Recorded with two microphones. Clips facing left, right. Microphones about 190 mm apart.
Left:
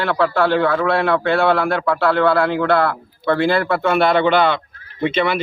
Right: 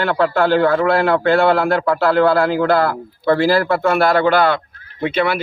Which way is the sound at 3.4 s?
Centre (ahead or behind).